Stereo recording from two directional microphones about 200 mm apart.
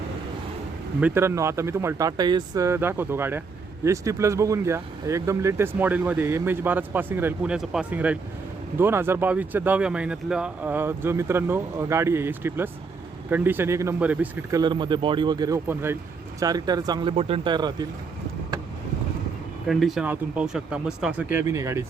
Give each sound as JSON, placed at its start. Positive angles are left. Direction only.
{"t": 1.0, "sound": "speech", "side_deg": -10}
{"t": 14.6, "sound": "speech", "side_deg": -20}
{"t": 19.6, "sound": "speech", "side_deg": 0}
{"t": 21.3, "sound": "speech", "side_deg": -15}